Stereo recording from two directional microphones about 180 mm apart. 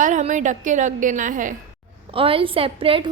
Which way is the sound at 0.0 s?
45° right (ahead or behind).